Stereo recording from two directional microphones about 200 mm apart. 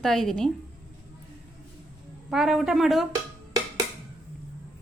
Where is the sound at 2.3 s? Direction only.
Centre (ahead or behind).